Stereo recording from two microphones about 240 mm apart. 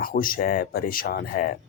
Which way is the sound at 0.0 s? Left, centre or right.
Left.